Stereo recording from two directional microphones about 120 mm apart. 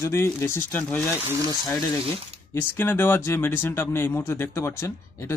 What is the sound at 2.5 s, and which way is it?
Speech, 20° left (ahead or behind).